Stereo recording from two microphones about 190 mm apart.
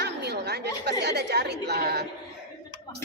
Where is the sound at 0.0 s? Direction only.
60° right (ahead or behind).